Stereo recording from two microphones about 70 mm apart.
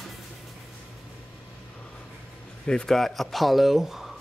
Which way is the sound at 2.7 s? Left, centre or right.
Centre.